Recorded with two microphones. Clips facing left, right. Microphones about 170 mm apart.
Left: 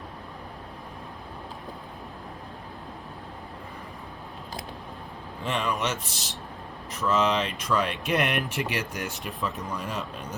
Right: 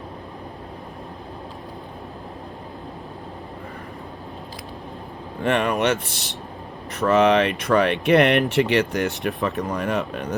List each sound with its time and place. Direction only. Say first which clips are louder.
5.4 s speech: right 8 dB; 65° right (ahead or behind)